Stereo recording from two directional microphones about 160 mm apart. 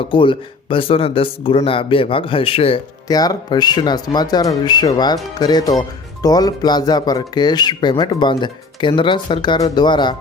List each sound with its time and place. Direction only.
0.0 s speech: 30° left (ahead or behind)
3.1 s speech: 25° left (ahead or behind)